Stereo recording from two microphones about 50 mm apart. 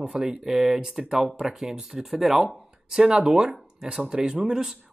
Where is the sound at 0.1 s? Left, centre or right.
Centre.